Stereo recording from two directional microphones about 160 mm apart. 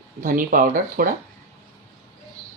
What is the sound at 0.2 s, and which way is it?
Speech, 60° right (ahead or behind).